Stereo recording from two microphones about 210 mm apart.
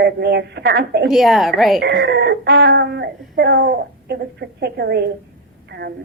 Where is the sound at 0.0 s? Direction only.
55° right (ahead or behind).